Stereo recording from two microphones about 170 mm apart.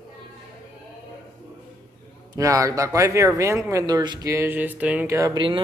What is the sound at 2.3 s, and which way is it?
Speech, 20° right (ahead or behind).